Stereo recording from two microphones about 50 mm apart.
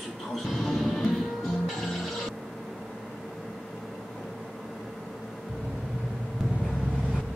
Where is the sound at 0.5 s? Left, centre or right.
Centre.